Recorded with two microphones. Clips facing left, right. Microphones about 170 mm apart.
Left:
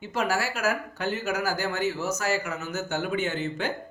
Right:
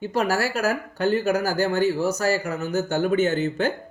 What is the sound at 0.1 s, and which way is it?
Speech, 35° right (ahead or behind).